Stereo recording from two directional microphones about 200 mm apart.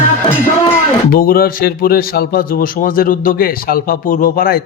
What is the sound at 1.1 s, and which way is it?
A man's voice, 45° left (ahead or behind).